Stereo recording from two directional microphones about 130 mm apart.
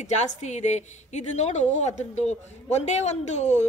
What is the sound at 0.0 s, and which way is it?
A woman's voice, 60° left (ahead or behind).